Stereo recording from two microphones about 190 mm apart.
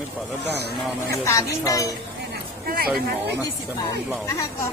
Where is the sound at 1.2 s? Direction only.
15° left (ahead or behind).